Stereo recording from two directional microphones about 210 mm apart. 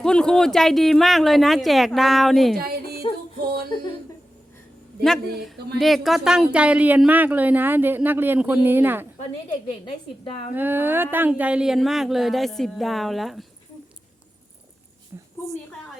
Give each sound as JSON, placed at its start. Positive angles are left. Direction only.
{"t": 0.0, "sound": "speech", "side_deg": 5}
{"t": 2.6, "sound": "music", "side_deg": -45}
{"t": 5.5, "sound": "a woman's voice", "side_deg": -50}
{"t": 5.8, "sound": "a woman's voice", "side_deg": 0}
{"t": 9.5, "sound": "a woman's voice", "side_deg": 25}
{"t": 10.5, "sound": "speech", "side_deg": -10}
{"t": 15.1, "sound": "a sound", "side_deg": -15}